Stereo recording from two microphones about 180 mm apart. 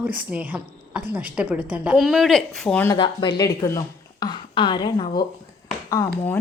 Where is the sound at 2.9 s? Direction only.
25° left (ahead or behind).